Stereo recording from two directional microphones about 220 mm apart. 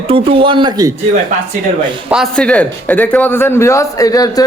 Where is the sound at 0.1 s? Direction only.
25° right (ahead or behind).